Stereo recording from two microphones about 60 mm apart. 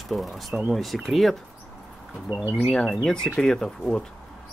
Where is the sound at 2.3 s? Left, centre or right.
Right.